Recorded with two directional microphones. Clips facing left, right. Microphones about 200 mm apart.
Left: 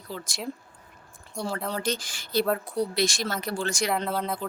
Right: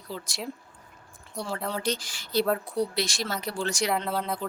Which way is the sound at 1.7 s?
50° left (ahead or behind).